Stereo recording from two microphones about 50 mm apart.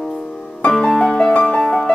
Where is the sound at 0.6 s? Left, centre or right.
Centre.